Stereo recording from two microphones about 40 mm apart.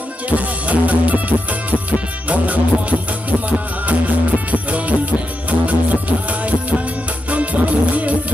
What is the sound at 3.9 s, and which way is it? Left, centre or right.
Music, right.